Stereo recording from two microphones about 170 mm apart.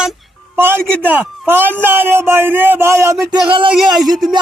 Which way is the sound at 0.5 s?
15° right (ahead or behind).